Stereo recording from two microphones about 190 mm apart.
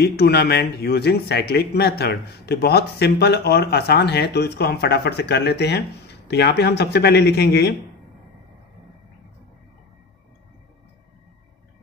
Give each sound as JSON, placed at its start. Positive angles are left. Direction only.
{"t": 0.0, "sound": "speech", "side_deg": 60}